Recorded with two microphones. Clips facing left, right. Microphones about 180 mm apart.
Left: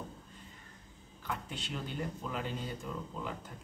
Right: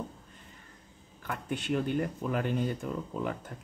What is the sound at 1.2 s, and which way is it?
Speech, 55° right (ahead or behind).